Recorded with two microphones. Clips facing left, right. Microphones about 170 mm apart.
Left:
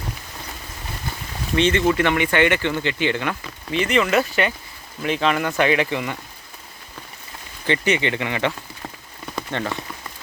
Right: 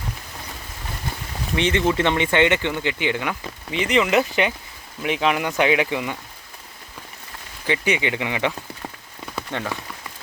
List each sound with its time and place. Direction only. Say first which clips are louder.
1.5 s speech: left 2 dB; 15° right (ahead or behind)
7.7 s speech: left 2 dB; 10° right (ahead or behind)
9.3 s rain on surface: left 2 dB; 10° right (ahead or behind)